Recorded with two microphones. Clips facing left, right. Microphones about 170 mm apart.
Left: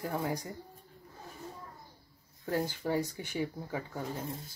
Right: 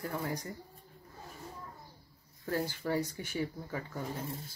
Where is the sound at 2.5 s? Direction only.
15° left (ahead or behind).